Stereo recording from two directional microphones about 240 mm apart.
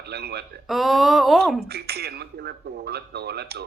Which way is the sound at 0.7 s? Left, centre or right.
Centre.